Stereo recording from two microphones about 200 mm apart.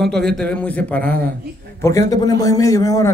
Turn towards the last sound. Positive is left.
turn(degrees=15)  # may be behind; listen again after turning